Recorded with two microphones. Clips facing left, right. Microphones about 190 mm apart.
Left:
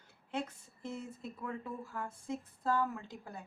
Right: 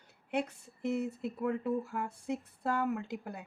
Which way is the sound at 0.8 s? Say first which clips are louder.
Right 9 dB; 65° right (ahead or behind).